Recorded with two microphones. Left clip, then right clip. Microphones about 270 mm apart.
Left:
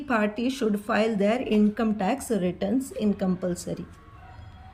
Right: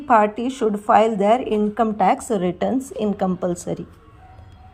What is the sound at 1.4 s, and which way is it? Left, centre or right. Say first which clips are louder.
A woman's voice: right 5 dB; centre.